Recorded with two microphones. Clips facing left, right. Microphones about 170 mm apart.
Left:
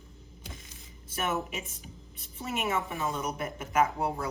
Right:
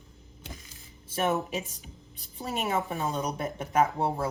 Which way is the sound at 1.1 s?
30° right (ahead or behind).